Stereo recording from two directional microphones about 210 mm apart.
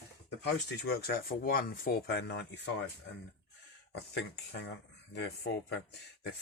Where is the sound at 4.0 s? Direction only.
55° left (ahead or behind).